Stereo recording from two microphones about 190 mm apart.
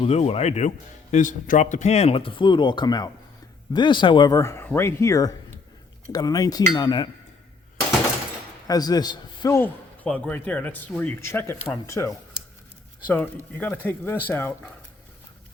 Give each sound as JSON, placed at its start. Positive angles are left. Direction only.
{"t": 0.0, "sound": "a man's voice", "side_deg": 35}
{"t": 8.6, "sound": "a man's voice", "side_deg": 20}